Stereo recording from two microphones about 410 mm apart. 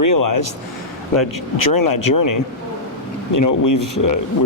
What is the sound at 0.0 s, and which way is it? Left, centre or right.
Speech, left.